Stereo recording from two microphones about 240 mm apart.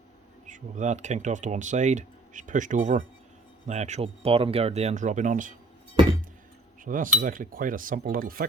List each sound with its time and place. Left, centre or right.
0.4 s speech: right
6.8 s speech: right